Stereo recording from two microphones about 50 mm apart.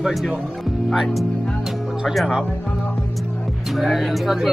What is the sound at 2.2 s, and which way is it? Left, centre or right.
Speech, centre.